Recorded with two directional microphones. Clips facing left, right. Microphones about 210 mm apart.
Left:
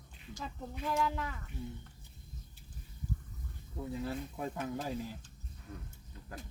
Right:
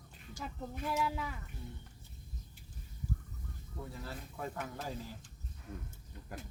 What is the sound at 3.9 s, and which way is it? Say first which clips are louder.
Speech: left 8 dB; 20° left (ahead or behind).